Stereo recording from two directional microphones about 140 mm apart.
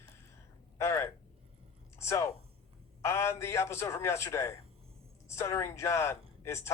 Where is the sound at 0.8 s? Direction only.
20° left (ahead or behind).